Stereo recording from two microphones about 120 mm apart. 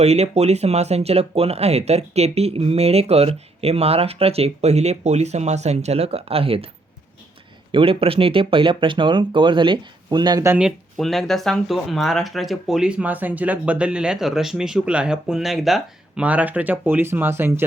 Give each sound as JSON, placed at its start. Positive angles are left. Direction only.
{"t": 0.0, "sound": "speech", "side_deg": -65}
{"t": 7.7, "sound": "speech", "side_deg": -50}
{"t": 10.6, "sound": "speech", "side_deg": 0}
{"t": 16.2, "sound": "speech", "side_deg": -10}